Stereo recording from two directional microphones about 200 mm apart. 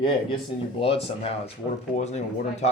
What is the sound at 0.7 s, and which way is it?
Speech, 30° left (ahead or behind).